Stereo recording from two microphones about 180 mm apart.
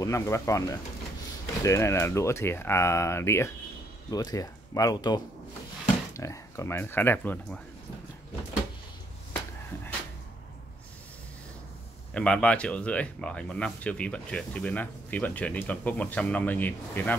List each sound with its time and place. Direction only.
0.0 s speech: 15° left (ahead or behind)
12.1 s speech: 5° left (ahead or behind)